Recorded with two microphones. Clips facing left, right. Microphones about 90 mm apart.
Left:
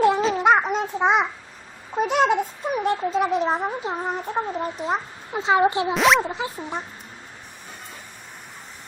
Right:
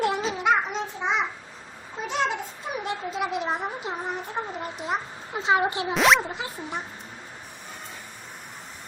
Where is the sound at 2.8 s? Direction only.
35° left (ahead or behind).